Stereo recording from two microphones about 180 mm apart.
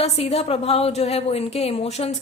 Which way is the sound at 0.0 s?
35° left (ahead or behind).